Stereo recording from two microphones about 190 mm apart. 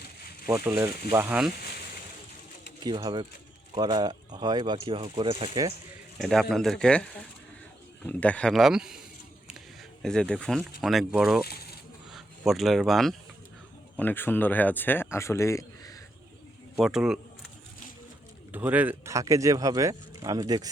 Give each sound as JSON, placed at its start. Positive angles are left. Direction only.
{"t": 0.4, "sound": "speech", "side_deg": -15}
{"t": 2.8, "sound": "speech", "side_deg": -20}
{"t": 6.1, "sound": "speech", "side_deg": 0}
{"t": 10.0, "sound": "speech", "side_deg": 5}
{"t": 16.8, "sound": "speech", "side_deg": -5}
{"t": 18.5, "sound": "speech", "side_deg": -10}